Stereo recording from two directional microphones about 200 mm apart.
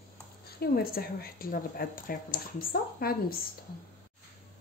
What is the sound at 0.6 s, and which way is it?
A woman's voice, 50° left (ahead or behind).